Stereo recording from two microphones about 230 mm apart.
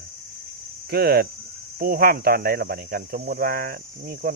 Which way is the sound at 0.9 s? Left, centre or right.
Right.